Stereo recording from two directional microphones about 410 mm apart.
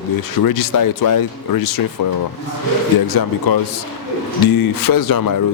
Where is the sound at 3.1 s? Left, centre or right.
Left.